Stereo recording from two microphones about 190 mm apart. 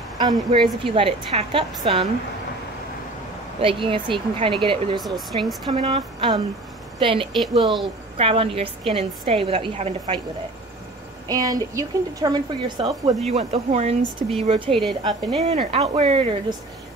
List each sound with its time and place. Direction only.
0.2 s speech: 25° right (ahead or behind)
3.6 s speech: 25° right (ahead or behind)
4.9 s speech: centre (ahead or behind)
5.7 s a woman's voice: 30° right (ahead or behind)
11.2 s speech: 20° right (ahead or behind)
13.3 s a woman's voice: 30° right (ahead or behind)